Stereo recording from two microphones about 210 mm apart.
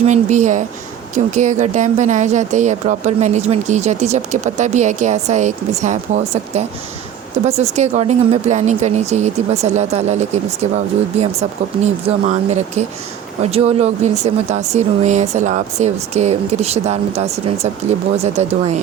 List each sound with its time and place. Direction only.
0.0 s speech: 35° right (ahead or behind)